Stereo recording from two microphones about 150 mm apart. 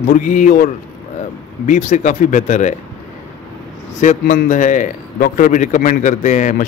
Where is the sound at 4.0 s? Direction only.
55° left (ahead or behind).